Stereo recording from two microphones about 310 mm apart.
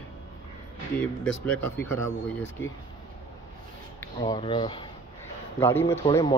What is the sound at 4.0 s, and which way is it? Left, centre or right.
Speech, centre.